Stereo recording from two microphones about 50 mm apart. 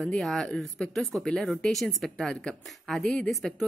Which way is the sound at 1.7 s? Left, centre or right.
Centre.